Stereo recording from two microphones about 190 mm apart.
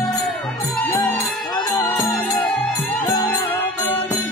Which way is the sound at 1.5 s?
20° left (ahead or behind).